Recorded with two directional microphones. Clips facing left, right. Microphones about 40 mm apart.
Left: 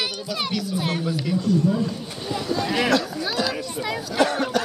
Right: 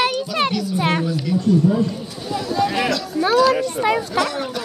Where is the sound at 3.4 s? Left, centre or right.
Right.